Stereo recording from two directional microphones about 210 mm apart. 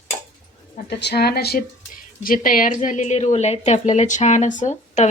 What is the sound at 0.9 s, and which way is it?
A woman's voice, 55° left (ahead or behind).